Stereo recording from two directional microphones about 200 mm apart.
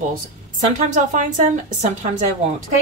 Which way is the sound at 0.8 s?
40° right (ahead or behind).